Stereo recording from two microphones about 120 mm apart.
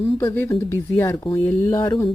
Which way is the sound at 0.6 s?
20° left (ahead or behind).